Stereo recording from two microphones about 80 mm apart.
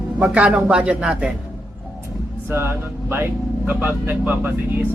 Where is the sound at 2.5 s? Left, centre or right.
Right.